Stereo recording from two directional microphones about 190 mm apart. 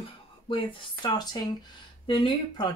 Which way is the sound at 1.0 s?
20° left (ahead or behind).